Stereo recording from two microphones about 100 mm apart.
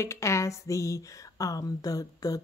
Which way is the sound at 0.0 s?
30° left (ahead or behind).